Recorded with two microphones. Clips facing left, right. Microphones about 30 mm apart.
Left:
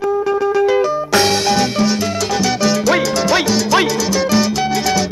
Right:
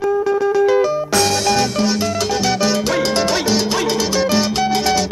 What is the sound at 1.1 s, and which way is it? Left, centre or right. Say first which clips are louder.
Music: left 3 dB; left.